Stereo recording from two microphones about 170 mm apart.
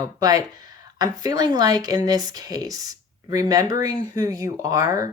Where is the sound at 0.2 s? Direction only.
20° right (ahead or behind).